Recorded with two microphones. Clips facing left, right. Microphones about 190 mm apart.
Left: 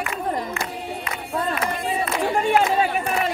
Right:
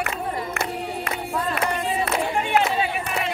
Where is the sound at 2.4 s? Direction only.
40° left (ahead or behind).